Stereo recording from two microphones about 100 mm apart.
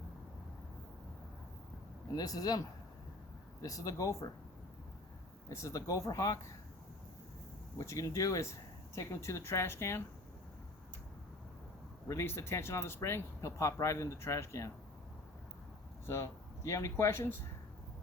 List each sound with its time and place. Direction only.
2.1 s speech: 40° left (ahead or behind)
5.5 s speech: 30° left (ahead or behind)
7.8 s speech: 30° left (ahead or behind)
12.0 s speech: 25° left (ahead or behind)
16.0 s speech: 25° left (ahead or behind)